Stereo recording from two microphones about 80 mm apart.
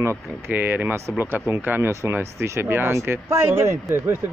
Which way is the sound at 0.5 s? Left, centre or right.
Right.